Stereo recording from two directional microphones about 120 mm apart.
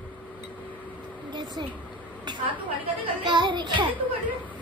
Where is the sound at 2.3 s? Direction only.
35° right (ahead or behind).